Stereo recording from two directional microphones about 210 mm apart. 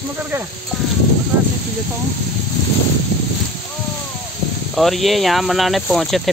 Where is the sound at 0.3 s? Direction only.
10° right (ahead or behind).